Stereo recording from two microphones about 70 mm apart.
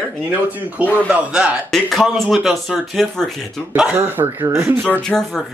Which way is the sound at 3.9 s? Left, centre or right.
Right.